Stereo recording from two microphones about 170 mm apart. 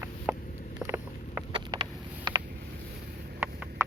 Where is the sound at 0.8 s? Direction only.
15° right (ahead or behind).